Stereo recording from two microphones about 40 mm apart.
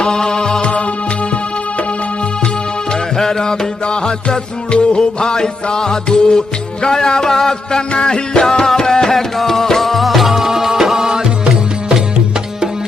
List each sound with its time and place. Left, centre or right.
0.0 s music: centre
3.2 s music: centre